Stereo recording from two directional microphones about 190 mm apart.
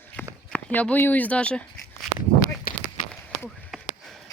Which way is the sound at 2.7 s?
50° left (ahead or behind).